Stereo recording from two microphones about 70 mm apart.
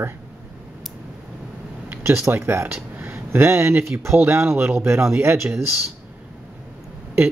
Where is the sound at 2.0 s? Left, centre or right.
Right.